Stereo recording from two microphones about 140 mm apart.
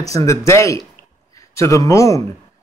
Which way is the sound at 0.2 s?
20° left (ahead or behind).